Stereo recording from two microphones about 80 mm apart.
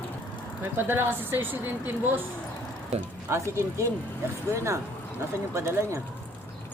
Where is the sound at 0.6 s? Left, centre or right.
Right.